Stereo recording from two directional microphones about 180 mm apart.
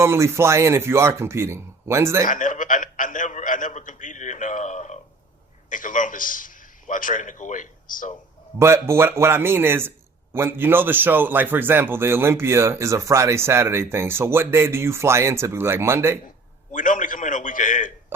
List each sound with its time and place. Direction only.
0.0 s a man's voice: 15° right (ahead or behind)
2.2 s a man's voice: 45° left (ahead or behind)
8.5 s a man's voice: 15° right (ahead or behind)
16.7 s a man's voice: 45° left (ahead or behind)